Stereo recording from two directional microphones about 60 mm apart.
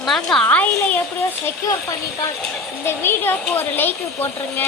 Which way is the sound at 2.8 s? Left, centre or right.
Left.